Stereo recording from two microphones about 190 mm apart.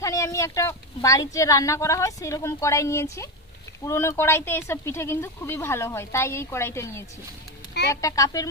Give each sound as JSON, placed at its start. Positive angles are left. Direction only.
{"t": 0.0, "sound": "speech", "side_deg": 15}